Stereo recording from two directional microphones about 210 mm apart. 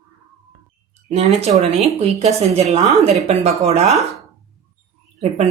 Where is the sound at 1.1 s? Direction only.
30° right (ahead or behind).